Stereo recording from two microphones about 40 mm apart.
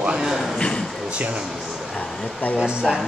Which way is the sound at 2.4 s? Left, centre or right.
Left.